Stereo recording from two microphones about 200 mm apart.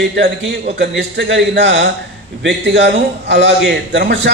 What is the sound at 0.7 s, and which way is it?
A man's voice, 60° right (ahead or behind).